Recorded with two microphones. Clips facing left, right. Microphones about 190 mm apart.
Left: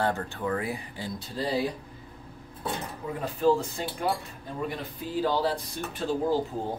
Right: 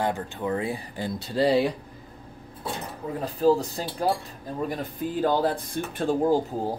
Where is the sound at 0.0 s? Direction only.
15° right (ahead or behind).